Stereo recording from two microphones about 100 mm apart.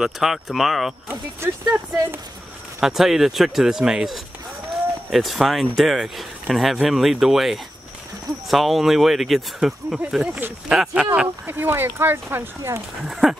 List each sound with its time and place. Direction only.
0.0 s speech: centre (ahead or behind)
2.8 s speech: 5° right (ahead or behind)
11.1 s speech: 20° right (ahead or behind)
13.1 s speech: 5° right (ahead or behind)